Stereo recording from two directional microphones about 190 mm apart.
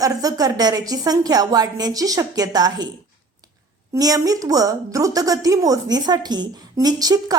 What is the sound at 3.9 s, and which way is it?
Speech, 20° right (ahead or behind).